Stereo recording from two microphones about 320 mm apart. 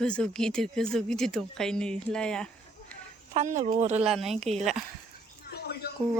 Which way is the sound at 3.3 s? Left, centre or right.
Right.